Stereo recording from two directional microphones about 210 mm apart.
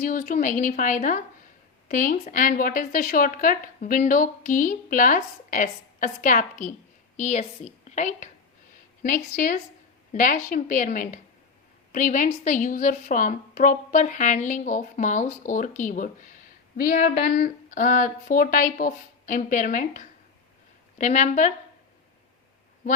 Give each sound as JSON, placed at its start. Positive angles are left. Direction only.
{"t": 0.0, "sound": "a woman's voice", "side_deg": 40}